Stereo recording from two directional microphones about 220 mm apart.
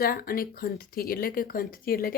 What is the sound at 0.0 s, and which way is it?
Speech, 40° left (ahead or behind).